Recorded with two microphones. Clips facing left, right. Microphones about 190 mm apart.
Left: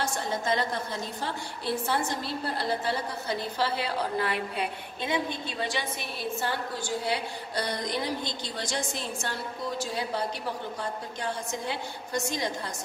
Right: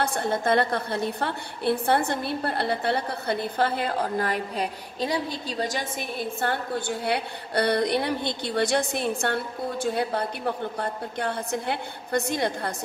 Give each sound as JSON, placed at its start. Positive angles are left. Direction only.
{"t": 0.0, "sound": "a woman's voice", "side_deg": -60}